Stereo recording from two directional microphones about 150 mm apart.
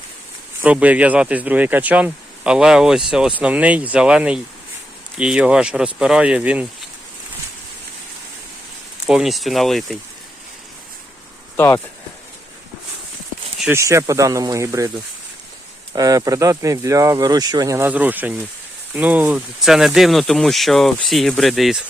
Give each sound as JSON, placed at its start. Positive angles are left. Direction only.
{"t": 0.6, "sound": "speech", "side_deg": -10}
{"t": 9.0, "sound": "speech", "side_deg": -5}
{"t": 11.5, "sound": "speech", "side_deg": 15}
{"t": 13.7, "sound": "speech", "side_deg": -20}
{"t": 16.0, "sound": "speech", "side_deg": -25}